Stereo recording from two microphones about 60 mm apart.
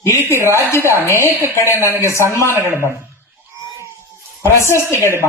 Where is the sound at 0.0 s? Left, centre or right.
Left.